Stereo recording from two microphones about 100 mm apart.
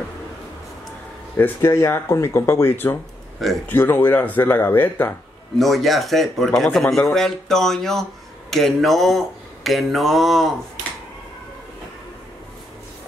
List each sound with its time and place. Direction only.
1.3 s speech: 25° left (ahead or behind)
5.6 s speech: centre (ahead or behind)